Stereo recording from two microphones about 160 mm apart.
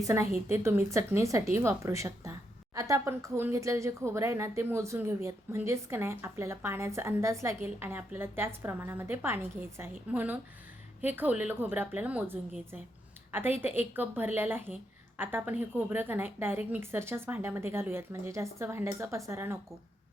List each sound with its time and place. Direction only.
0.0 s a woman's voice: 15° right (ahead or behind)